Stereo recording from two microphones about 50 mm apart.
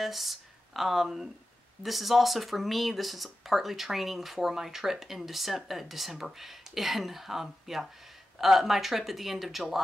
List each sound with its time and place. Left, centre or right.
0.0 s speech: centre